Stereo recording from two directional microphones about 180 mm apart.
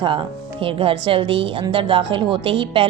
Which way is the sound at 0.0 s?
25° right (ahead or behind).